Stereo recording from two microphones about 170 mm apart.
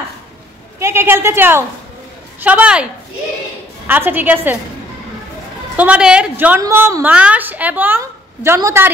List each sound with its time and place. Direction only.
0.7 s a woman's voice: 15° right (ahead or behind)
5.8 s a woman's voice: 5° right (ahead or behind)